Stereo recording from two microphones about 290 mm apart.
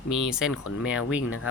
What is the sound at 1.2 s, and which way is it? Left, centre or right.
Speech, left.